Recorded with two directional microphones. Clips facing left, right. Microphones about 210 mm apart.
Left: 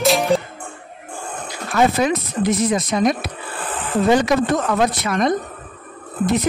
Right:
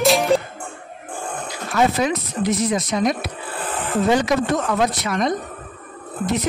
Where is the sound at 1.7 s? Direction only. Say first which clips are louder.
Left 2 dB; 55° left (ahead or behind).